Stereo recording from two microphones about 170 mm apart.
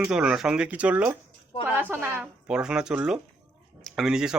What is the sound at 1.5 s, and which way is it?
Speech, 30° left (ahead or behind).